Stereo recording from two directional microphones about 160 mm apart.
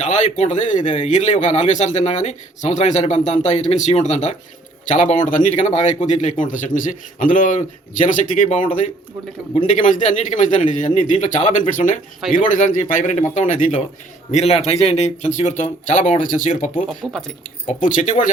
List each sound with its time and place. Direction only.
0.0 s speech: 45° left (ahead or behind)
17.0 s speech: centre (ahead or behind)
17.7 s speech: 55° left (ahead or behind)